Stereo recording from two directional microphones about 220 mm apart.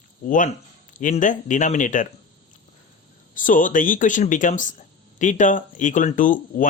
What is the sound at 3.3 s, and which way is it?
Speech, 35° left (ahead or behind).